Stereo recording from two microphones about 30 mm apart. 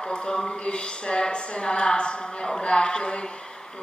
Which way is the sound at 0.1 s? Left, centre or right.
Left.